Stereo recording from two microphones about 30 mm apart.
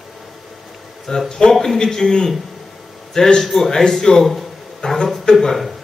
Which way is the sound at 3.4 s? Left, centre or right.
Centre.